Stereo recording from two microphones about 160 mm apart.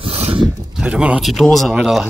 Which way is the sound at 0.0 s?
35° right (ahead or behind).